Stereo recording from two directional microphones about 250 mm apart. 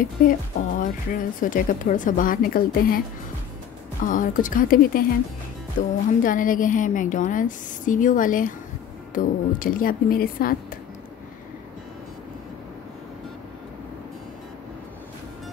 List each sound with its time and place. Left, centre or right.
0.0 s speech: left
4.0 s speech: left